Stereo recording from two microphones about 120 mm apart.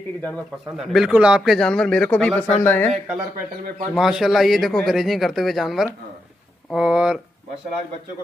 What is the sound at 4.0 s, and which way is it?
A man's voice, 5° right (ahead or behind).